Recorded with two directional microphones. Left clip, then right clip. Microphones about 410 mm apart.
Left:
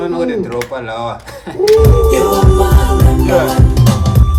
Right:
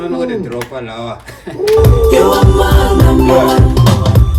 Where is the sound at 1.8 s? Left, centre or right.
Centre.